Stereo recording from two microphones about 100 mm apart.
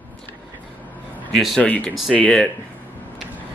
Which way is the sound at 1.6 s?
15° left (ahead or behind).